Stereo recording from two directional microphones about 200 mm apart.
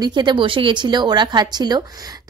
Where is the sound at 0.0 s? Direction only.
25° right (ahead or behind).